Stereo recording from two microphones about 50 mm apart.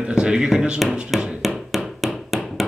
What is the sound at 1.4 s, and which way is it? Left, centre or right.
Hammer, centre.